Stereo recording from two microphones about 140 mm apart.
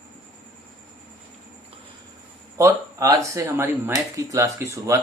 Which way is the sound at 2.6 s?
25° right (ahead or behind).